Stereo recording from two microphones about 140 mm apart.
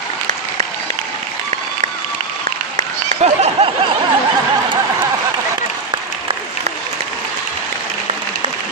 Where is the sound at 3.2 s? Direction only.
50° right (ahead or behind).